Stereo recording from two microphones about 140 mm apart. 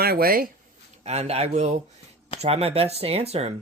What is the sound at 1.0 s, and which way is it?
Speech, 50° right (ahead or behind).